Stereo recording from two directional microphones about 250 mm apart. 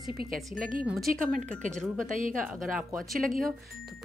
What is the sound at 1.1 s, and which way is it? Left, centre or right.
Speech, right.